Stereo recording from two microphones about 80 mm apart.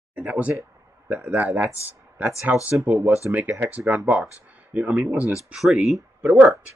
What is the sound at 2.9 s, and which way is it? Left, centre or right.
Speech, right.